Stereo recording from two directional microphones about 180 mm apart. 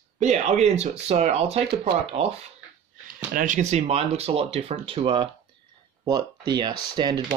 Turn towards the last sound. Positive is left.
turn(degrees=-25)  # may be behind; listen again after turning